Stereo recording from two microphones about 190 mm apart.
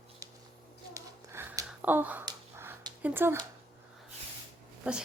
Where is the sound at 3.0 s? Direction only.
10° right (ahead or behind).